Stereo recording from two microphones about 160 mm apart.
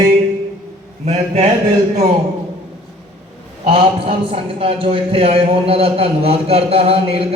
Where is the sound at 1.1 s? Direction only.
45° right (ahead or behind).